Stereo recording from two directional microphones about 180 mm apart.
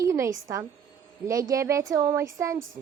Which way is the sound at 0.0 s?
15° right (ahead or behind).